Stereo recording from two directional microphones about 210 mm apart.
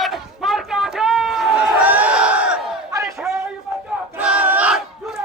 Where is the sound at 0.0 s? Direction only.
Centre (ahead or behind).